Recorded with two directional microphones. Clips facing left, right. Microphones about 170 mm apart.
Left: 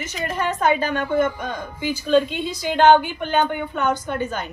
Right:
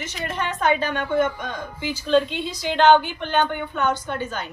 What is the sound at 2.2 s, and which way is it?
Speech, 45° left (ahead or behind).